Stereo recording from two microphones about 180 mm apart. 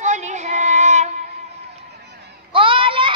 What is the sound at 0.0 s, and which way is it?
Child singing, 40° right (ahead or behind).